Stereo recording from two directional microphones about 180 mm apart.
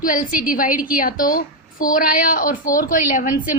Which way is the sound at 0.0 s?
50° left (ahead or behind).